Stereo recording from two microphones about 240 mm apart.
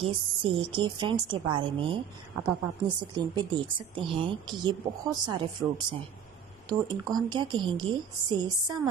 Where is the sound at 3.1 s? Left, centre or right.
Centre.